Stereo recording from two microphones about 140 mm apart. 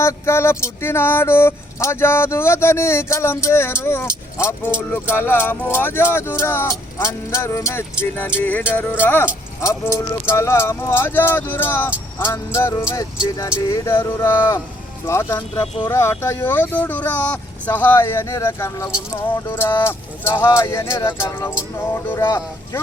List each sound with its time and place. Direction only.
0.0 s speech: 20° left (ahead or behind)
15.6 s speech: 40° left (ahead or behind)
15.9 s speech: 20° left (ahead or behind)